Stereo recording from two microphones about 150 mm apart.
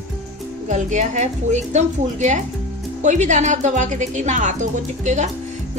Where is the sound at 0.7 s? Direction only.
50° right (ahead or behind).